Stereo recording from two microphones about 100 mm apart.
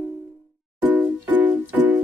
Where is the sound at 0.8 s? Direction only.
15° right (ahead or behind).